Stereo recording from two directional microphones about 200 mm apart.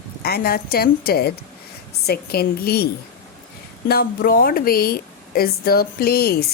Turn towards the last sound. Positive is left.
turn(degrees=50)  # may be behind; listen again after turning